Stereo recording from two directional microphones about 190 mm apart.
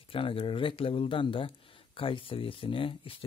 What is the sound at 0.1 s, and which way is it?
Speech, 30° left (ahead or behind).